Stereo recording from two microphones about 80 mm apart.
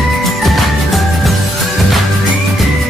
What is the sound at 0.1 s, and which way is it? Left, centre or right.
Music, centre.